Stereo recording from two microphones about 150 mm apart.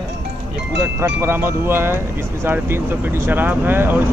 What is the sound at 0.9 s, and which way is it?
Speech, 15° right (ahead or behind).